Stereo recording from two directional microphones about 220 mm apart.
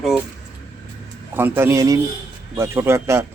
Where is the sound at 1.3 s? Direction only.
10° right (ahead or behind).